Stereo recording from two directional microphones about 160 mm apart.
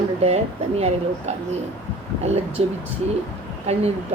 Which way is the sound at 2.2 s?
40° right (ahead or behind).